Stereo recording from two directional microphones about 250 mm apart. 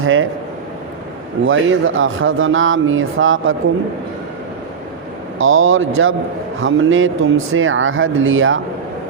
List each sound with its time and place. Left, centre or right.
0.0 s speech: right
1.5 s speech: right
5.4 s speech: right